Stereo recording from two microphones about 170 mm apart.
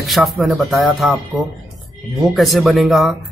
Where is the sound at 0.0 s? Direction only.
Centre (ahead or behind).